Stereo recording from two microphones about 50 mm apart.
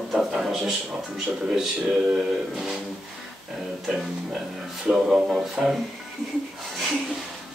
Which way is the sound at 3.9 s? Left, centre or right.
Centre.